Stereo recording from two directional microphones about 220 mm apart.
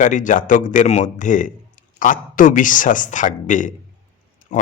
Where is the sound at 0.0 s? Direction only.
35° left (ahead or behind).